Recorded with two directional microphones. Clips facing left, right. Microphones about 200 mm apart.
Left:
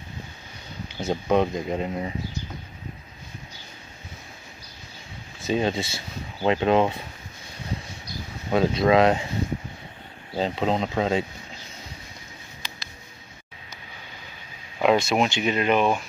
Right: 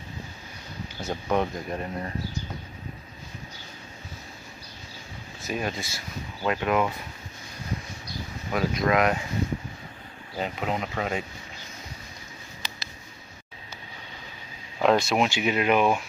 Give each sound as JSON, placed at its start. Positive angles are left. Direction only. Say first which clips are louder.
{"t": 0.8, "sound": "speech", "louder": "left 5 dB", "side_deg": 20}
{"t": 5.4, "sound": "speech", "louder": "left 7 dB", "side_deg": 25}
{"t": 8.5, "sound": "speech", "louder": "left 5 dB", "side_deg": 30}
{"t": 10.3, "sound": "speech", "louder": "left 5 dB", "side_deg": 30}
{"t": 14.8, "sound": "speech", "louder": "left 1 dB", "side_deg": 0}